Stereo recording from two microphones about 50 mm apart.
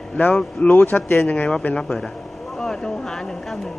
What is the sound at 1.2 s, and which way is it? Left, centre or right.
Speech, left.